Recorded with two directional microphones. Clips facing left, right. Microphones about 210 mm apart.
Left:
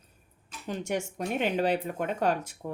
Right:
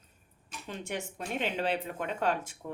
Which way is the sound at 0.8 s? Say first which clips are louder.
Left 6 dB; 45° left (ahead or behind).